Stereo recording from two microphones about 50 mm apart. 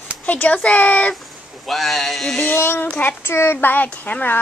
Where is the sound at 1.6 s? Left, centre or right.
Centre.